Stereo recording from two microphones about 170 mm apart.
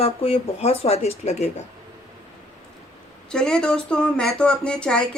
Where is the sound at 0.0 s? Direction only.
35° left (ahead or behind).